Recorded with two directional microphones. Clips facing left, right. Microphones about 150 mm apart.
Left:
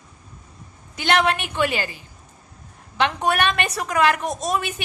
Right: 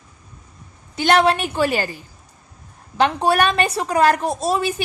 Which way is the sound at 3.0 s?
35° right (ahead or behind).